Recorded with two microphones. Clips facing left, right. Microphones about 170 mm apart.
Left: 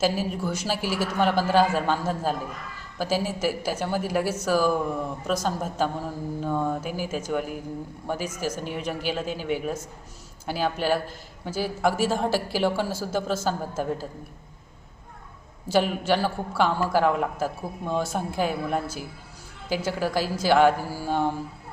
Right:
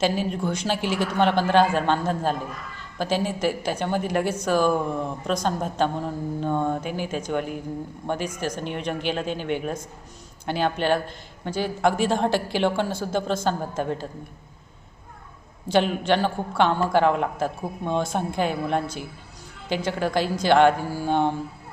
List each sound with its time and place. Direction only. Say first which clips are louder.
0.0 s speech: right 1 dB; 5° left (ahead or behind)
15.7 s speech: right 2 dB; 5° left (ahead or behind)